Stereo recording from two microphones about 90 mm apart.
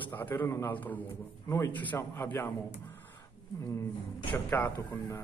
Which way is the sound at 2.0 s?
30° left (ahead or behind).